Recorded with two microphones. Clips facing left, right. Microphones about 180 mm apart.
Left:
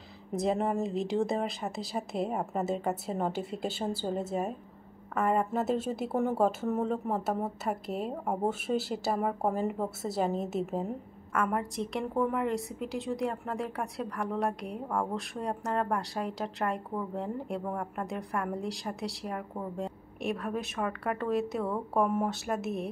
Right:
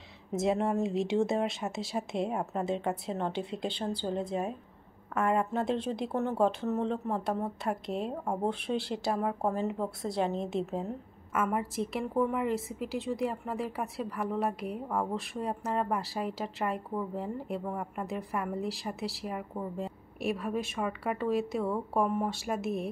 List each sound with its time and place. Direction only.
0.3 s a woman's voice: centre (ahead or behind)